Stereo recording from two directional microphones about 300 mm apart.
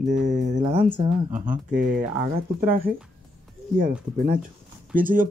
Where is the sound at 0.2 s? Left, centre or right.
Right.